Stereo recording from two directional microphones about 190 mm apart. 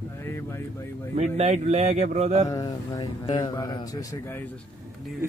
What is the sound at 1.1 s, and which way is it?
Mantra, 35° right (ahead or behind).